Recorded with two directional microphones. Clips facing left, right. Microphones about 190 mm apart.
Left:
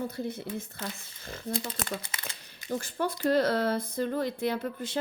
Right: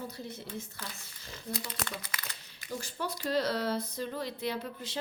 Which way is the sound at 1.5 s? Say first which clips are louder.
Left 5 dB; 30° left (ahead or behind).